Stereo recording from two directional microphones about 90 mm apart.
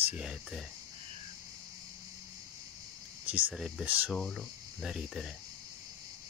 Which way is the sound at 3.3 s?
20° right (ahead or behind).